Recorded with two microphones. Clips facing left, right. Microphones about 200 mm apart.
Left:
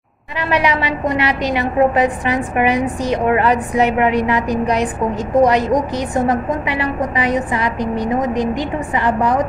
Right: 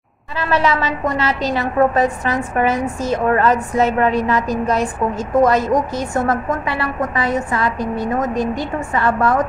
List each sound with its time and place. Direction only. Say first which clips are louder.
0.4 s a woman's voice: even; 15° left (ahead or behind)